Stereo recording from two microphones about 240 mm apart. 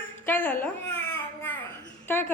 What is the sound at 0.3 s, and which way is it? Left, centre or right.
Speech, centre.